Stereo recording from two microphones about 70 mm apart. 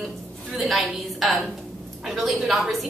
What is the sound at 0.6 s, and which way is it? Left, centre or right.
A woman's voice, centre.